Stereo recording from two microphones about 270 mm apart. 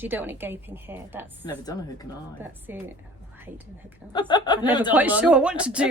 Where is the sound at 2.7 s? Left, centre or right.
Centre.